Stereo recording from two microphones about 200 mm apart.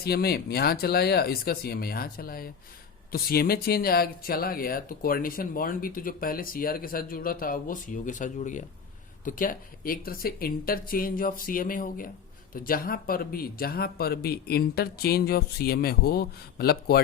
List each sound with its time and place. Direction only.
0.0 s speech: 50° left (ahead or behind)